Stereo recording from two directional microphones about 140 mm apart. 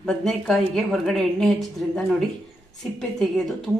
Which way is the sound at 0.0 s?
5° left (ahead or behind).